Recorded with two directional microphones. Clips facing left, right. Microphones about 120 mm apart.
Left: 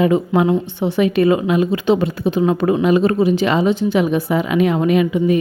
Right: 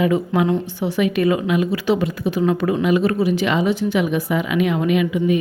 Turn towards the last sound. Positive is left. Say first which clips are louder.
# left 3 dB
turn(degrees=35)  # may be behind; listen again after turning